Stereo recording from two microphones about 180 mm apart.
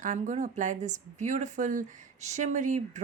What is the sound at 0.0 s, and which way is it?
Speech, 45° right (ahead or behind).